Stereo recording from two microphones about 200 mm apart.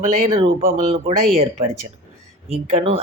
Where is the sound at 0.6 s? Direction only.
35° right (ahead or behind).